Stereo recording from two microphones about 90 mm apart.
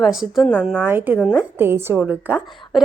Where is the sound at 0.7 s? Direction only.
20° right (ahead or behind).